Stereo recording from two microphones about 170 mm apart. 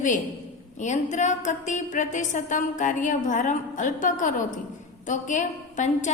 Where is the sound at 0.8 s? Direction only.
45° left (ahead or behind).